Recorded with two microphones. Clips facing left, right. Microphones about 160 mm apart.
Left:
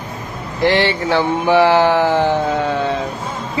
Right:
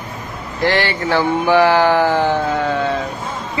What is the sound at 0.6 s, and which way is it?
Speech, 20° left (ahead or behind).